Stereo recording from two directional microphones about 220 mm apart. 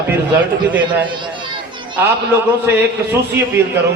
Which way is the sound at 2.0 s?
10° right (ahead or behind).